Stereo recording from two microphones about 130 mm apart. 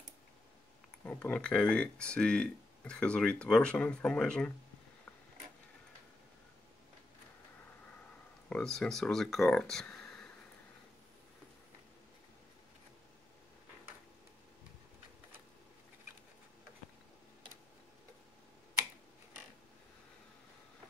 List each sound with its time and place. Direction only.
1.0 s speech: 10° left (ahead or behind)
8.5 s speech: 5° left (ahead or behind)